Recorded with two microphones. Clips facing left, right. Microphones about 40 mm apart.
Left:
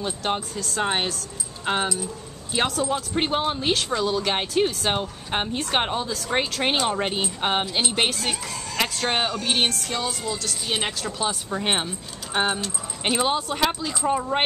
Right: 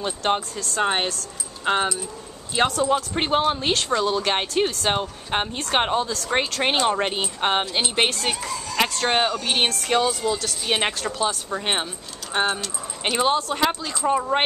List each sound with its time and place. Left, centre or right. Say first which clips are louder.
0.0 s speech: right 3 dB; centre
9.8 s a woman's voice: right 7 dB; right
10.9 s speech: right 3 dB; centre